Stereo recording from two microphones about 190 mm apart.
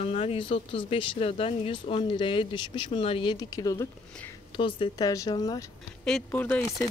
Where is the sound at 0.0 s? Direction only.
30° left (ahead or behind).